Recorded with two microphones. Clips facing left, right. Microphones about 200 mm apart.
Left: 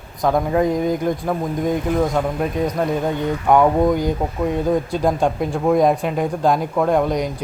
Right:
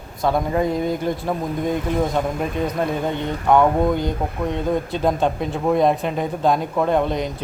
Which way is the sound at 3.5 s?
15° left (ahead or behind).